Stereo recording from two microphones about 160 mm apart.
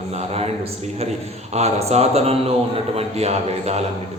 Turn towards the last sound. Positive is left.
turn(degrees=-40)  # may be behind; listen again after turning